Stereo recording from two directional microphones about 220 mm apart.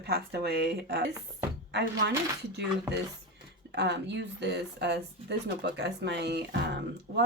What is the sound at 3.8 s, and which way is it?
Speech, 50° right (ahead or behind).